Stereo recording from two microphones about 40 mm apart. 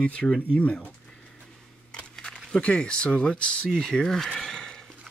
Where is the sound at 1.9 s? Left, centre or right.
Left.